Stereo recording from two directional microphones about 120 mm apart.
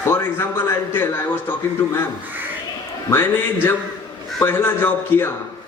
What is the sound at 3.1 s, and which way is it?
A man's voice, 20° left (ahead or behind).